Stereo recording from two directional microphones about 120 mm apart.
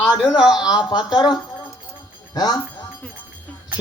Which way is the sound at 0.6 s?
35° left (ahead or behind).